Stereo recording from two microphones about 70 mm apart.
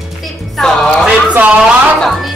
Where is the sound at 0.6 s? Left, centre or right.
Centre.